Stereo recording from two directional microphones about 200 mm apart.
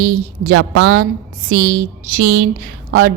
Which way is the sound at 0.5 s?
50° right (ahead or behind).